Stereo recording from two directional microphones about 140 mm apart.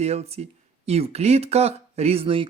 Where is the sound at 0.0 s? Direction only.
45° right (ahead or behind).